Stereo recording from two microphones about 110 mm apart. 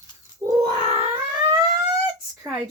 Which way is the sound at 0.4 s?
25° right (ahead or behind).